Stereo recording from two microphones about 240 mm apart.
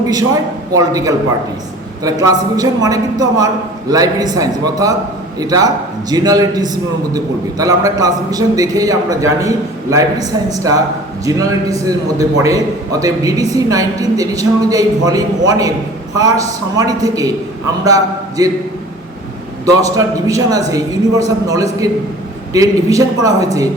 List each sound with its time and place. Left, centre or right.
0.0 s a man's voice: centre
16.7 s a man's voice: centre
19.6 s a man's voice: centre